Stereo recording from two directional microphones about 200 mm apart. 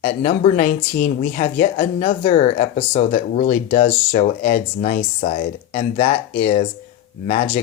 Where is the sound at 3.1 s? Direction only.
45° left (ahead or behind).